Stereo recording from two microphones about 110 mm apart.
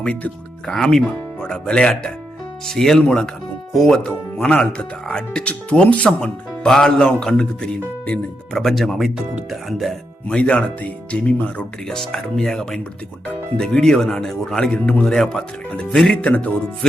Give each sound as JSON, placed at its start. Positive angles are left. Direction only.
{"t": 0.0, "sound": "speech", "side_deg": 15}